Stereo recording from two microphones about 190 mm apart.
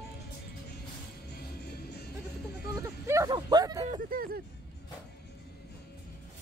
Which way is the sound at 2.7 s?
15° right (ahead or behind).